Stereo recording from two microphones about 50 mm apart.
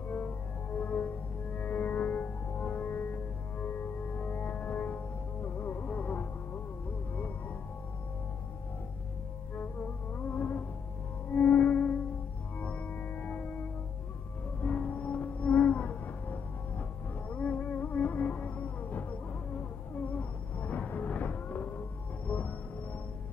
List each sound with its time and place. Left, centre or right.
0.7 s music: left
10.1 s insect: left
11.3 s music: left